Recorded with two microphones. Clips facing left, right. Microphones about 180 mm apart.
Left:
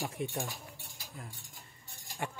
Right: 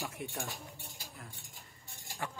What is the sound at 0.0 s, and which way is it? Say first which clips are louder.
Speech: left 4 dB; 20° left (ahead or behind).